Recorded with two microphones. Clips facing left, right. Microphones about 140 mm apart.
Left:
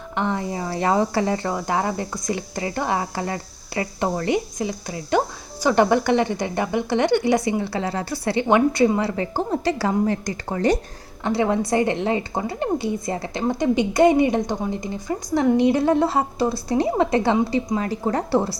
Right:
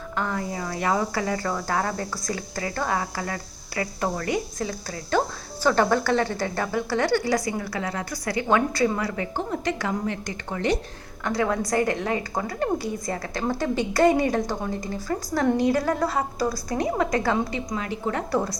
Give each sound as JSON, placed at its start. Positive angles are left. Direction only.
{"t": 0.2, "sound": "a woman's voice", "side_deg": 25}
{"t": 11.2, "sound": "a woman's voice", "side_deg": 25}